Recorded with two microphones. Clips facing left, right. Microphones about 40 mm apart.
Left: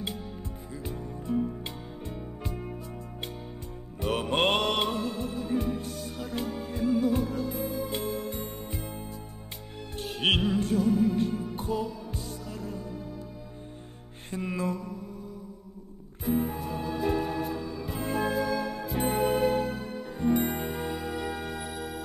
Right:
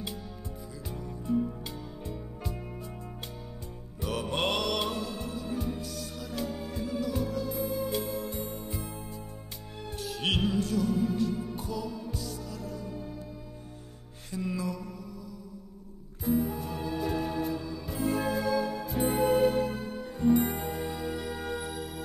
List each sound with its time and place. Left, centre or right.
0.8 s music: left
4.0 s music: left
10.1 s music: left
14.3 s mantra: left
16.3 s music: left
18.4 s music: left; by 21.7 s centre